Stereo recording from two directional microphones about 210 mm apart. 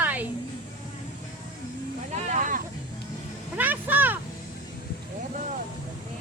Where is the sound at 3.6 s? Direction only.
10° right (ahead or behind).